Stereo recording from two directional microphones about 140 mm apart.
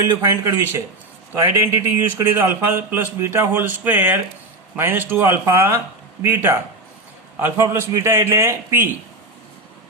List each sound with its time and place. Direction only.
0.0 s a man's voice: 20° right (ahead or behind)